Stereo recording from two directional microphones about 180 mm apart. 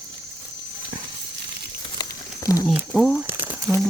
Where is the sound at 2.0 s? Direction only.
20° left (ahead or behind).